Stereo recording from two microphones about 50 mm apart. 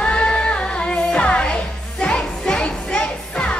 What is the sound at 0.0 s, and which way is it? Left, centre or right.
Music, centre.